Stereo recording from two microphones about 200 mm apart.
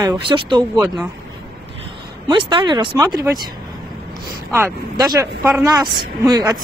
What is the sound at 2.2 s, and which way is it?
Speech, 25° right (ahead or behind).